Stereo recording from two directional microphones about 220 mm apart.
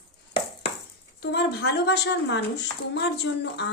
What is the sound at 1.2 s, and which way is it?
A woman's voice, 50° left (ahead or behind).